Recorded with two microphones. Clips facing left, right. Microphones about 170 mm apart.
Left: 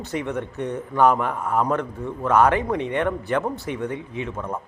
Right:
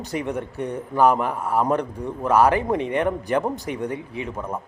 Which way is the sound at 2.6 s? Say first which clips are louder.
Right 1 dB; 25° right (ahead or behind).